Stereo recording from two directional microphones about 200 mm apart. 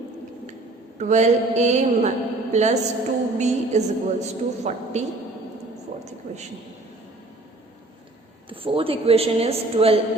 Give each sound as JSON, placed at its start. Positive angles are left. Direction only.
{"t": 0.9, "sound": "a woman's voice", "side_deg": -35}
{"t": 6.3, "sound": "a sound", "side_deg": -35}
{"t": 8.4, "sound": "a man's voice", "side_deg": -25}